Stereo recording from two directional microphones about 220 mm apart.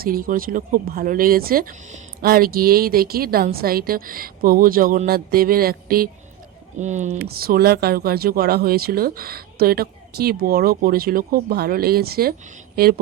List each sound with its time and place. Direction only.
0.0 s speech: 40° right (ahead or behind)
7.2 s speech: 45° right (ahead or behind)